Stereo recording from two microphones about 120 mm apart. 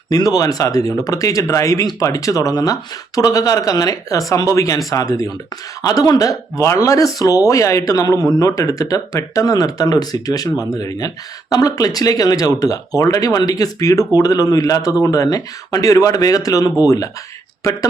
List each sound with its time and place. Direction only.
0.1 s speech: 30° left (ahead or behind)